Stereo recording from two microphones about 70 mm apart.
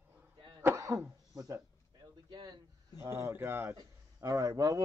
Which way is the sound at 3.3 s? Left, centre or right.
Right.